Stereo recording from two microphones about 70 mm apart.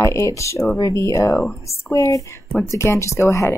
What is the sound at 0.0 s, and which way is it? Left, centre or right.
Speech, left.